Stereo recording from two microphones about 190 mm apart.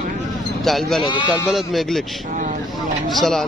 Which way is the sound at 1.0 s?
25° left (ahead or behind).